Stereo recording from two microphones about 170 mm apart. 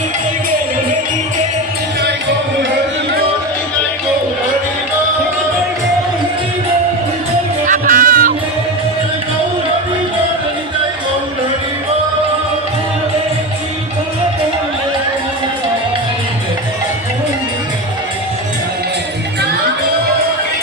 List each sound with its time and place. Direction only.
7.7 s music: 55° right (ahead or behind)